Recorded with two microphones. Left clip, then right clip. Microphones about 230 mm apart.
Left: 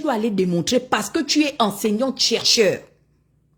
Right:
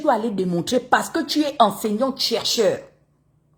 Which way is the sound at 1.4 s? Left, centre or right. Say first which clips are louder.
Right 5 dB; left.